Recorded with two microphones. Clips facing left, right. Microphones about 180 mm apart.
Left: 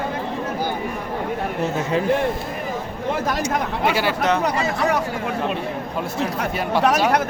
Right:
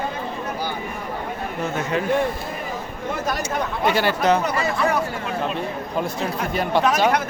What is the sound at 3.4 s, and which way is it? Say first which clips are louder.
Speech: left 2 dB; 10° left (ahead or behind).